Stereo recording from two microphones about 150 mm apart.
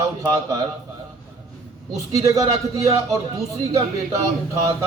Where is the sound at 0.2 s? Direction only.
30° right (ahead or behind).